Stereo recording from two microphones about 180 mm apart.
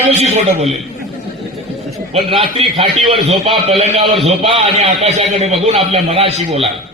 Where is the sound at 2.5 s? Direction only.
30° right (ahead or behind).